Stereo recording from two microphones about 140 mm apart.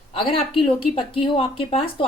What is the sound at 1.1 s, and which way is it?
Speech, 40° left (ahead or behind).